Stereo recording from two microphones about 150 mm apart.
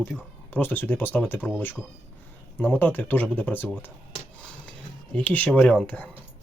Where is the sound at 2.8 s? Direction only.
15° left (ahead or behind).